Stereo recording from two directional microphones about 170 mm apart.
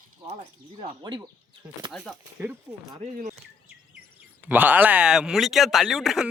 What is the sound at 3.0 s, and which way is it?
Speech, 45° right (ahead or behind).